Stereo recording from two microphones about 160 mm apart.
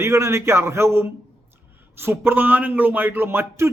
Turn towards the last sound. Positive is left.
turn(degrees=-15)  # may be behind; listen again after turning